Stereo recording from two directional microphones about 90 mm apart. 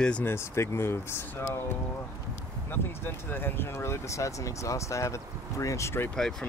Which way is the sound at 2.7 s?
25° left (ahead or behind).